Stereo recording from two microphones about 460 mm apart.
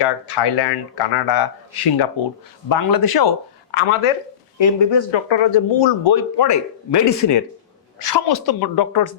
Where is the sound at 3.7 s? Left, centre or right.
Left.